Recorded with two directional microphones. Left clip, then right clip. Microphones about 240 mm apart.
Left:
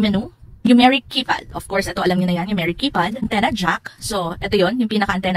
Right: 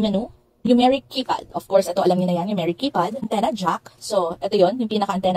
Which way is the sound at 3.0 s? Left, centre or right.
Left.